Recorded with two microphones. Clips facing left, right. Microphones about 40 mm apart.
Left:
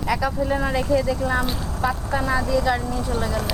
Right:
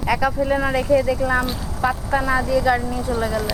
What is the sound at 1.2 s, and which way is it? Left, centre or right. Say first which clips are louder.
Speech: right 2 dB; centre.